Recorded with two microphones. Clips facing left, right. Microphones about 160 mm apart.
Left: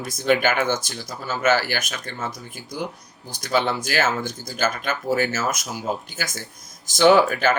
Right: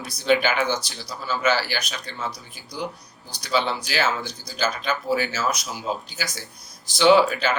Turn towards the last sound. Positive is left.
turn(degrees=50)  # may be behind; listen again after turning